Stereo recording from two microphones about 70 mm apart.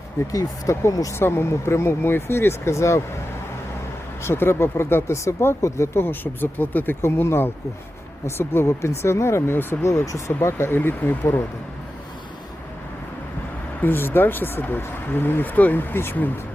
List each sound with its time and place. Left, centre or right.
0.3 s speech: left
1.2 s speech: left
4.2 s speech: left
10.8 s speech: left
13.8 s speech: left